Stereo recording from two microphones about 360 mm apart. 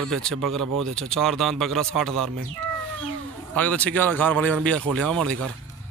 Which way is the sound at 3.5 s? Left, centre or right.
Centre.